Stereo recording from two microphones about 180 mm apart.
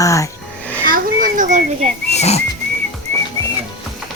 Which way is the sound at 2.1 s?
35° left (ahead or behind).